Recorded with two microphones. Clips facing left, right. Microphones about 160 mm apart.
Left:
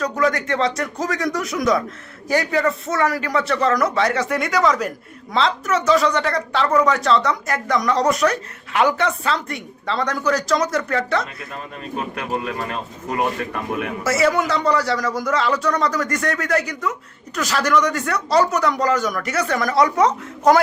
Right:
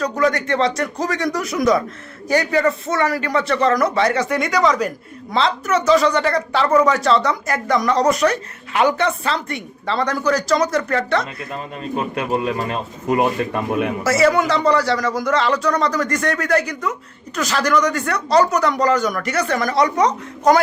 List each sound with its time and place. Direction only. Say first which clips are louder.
0.0 s speech: right 2 dB; centre (ahead or behind)
11.8 s speech: right 4 dB; 25° right (ahead or behind)
14.0 s speech: right 2 dB; centre (ahead or behind)